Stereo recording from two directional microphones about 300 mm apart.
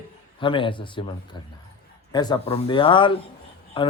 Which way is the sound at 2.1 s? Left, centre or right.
Centre.